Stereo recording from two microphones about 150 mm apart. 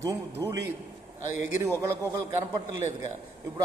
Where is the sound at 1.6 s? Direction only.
20° right (ahead or behind).